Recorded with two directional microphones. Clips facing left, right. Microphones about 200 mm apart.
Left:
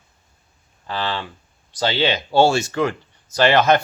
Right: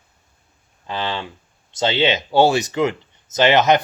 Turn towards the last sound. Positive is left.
turn(degrees=-20)  # may be behind; listen again after turning